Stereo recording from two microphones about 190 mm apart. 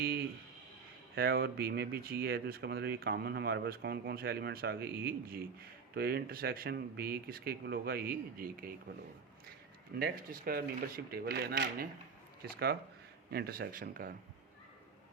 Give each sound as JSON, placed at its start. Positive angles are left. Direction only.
{"t": 1.1, "sound": "speech", "side_deg": -55}
{"t": 10.0, "sound": "speech", "side_deg": -50}